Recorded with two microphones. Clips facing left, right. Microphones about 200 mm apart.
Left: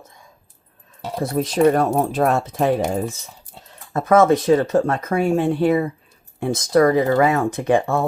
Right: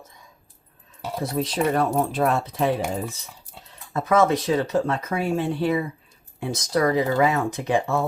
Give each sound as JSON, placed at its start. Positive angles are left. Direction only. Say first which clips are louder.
{"t": 1.2, "sound": "speech", "louder": "left 7 dB", "side_deg": 45}